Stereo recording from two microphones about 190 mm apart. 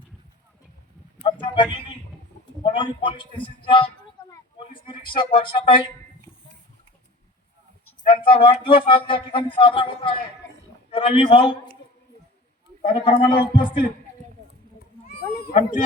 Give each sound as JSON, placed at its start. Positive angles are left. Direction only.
{"t": 1.2, "sound": "a sound", "side_deg": 25}
{"t": 2.7, "sound": "a man's voice", "side_deg": 25}
{"t": 8.0, "sound": "speech", "side_deg": 25}
{"t": 12.8, "sound": "speech", "side_deg": 30}
{"t": 15.0, "sound": "cat", "side_deg": 50}